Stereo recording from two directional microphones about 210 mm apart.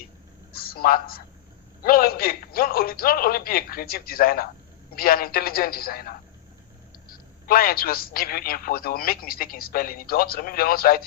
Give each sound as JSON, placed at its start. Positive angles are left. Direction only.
{"t": 0.5, "sound": "a man's voice", "side_deg": 45}
{"t": 7.4, "sound": "speech", "side_deg": 45}